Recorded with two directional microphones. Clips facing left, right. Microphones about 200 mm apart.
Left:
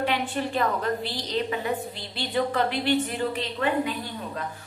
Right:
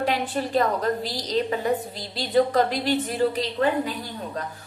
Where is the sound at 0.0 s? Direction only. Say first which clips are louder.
Right 2 dB; 40° right (ahead or behind).